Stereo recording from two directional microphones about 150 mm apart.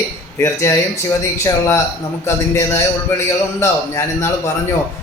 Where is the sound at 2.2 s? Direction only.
20° left (ahead or behind).